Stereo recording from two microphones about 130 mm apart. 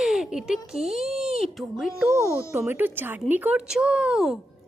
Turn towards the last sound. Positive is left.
turn(degrees=-5)  # may be behind; listen again after turning